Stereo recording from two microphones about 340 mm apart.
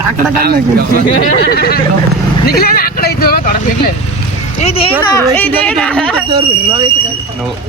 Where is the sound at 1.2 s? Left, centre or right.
Left.